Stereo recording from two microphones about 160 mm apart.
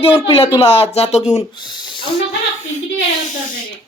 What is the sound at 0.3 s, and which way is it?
Speech, 35° left (ahead or behind).